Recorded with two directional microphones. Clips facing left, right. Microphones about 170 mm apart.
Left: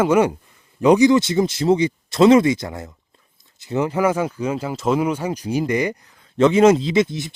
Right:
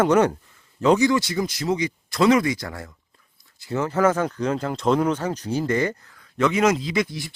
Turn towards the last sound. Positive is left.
turn(degrees=20)  # may be behind; listen again after turning